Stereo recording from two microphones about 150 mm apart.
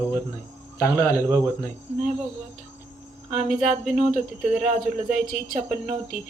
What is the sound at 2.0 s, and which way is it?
Speech, 5° right (ahead or behind).